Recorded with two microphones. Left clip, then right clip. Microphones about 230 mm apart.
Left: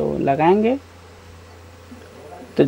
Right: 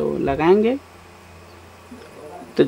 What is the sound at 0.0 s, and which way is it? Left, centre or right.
Speech, centre.